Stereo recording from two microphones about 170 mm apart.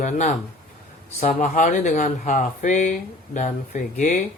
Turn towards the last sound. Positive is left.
turn(degrees=45)  # may be behind; listen again after turning